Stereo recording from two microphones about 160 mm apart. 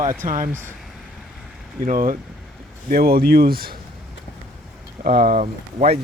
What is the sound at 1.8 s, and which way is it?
Speech, 55° right (ahead or behind).